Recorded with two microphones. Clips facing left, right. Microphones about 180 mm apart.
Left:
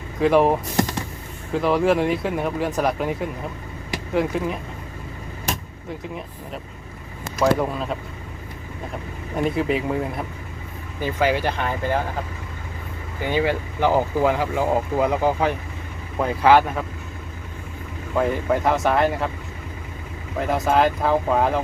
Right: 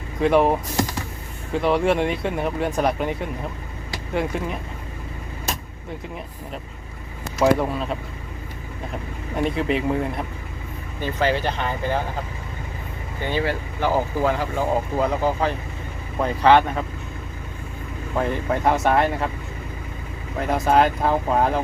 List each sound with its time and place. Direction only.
0.2 s speech: centre (ahead or behind)
1.5 s speech: centre (ahead or behind)
7.3 s speech: centre (ahead or behind)
9.4 s speech: centre (ahead or behind)
13.2 s speech: 15° left (ahead or behind)
18.2 s speech: 5° left (ahead or behind)
20.4 s speech: centre (ahead or behind)